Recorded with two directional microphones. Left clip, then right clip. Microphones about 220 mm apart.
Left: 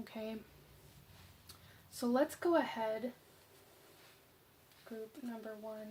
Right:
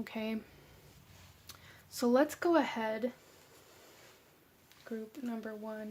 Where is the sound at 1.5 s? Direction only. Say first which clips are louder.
Right 8 dB; 30° right (ahead or behind).